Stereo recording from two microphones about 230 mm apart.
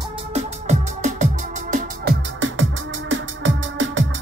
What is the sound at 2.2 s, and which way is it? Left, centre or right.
Music, right.